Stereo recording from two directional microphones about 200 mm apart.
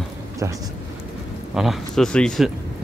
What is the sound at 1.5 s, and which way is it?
Speech, centre (ahead or behind).